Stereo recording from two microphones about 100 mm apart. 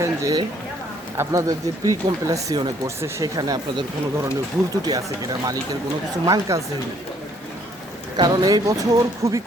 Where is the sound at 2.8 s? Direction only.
30° right (ahead or behind).